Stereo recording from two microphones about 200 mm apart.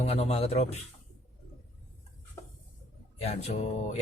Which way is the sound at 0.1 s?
30° left (ahead or behind).